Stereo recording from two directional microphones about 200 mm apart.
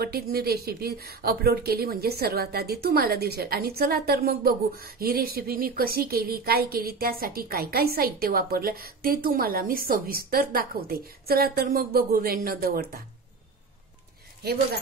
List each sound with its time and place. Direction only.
0.0 s a woman's voice: 50° right (ahead or behind)